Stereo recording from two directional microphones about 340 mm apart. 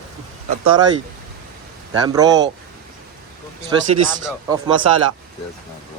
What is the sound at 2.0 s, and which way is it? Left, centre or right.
Speech, centre.